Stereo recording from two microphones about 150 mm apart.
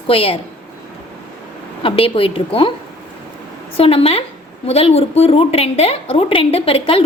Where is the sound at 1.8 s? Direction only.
40° left (ahead or behind).